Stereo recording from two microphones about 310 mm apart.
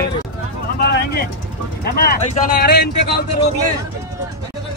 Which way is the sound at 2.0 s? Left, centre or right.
Left.